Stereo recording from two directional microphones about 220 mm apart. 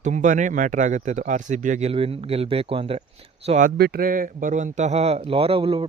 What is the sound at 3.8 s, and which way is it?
Speech, 45° right (ahead or behind).